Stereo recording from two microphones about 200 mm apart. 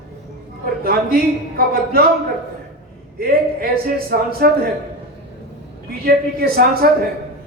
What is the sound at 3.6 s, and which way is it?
Speech, 50° right (ahead or behind).